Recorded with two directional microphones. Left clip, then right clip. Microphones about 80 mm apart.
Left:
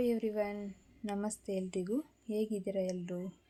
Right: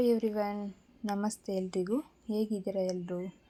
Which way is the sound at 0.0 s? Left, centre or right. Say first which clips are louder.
Right 4 dB; right.